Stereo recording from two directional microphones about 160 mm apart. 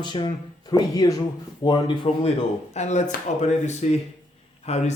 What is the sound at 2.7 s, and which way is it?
Speech, 45° left (ahead or behind).